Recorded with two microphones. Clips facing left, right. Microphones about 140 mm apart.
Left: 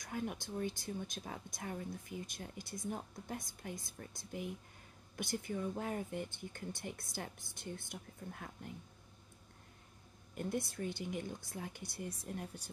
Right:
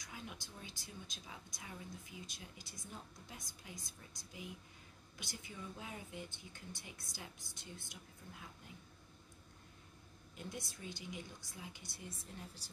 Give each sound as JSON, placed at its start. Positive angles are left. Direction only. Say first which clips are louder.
{"t": 0.0, "sound": "speech", "louder": "left 10 dB", "side_deg": 50}
{"t": 10.3, "sound": "a woman's voice", "louder": "left 10 dB", "side_deg": 55}